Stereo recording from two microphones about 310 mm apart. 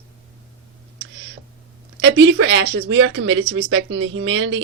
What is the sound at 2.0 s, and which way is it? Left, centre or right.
Speech, right.